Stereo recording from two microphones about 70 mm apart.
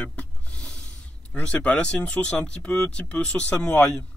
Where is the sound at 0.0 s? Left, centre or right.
Centre.